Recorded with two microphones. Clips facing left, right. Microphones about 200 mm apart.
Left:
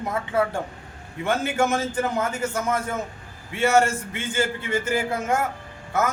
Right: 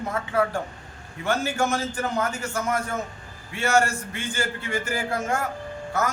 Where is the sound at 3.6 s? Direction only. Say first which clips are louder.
Left 3 dB; 20° left (ahead or behind).